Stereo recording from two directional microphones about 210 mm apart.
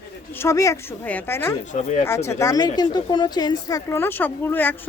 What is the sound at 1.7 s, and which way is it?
Speech, 35° left (ahead or behind).